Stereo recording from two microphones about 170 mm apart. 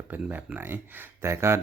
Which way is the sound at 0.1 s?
10° right (ahead or behind).